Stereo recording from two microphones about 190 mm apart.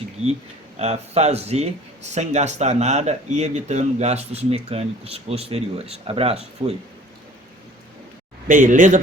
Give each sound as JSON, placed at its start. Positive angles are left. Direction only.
{"t": 0.8, "sound": "speech", "side_deg": -35}
{"t": 8.4, "sound": "speech", "side_deg": -45}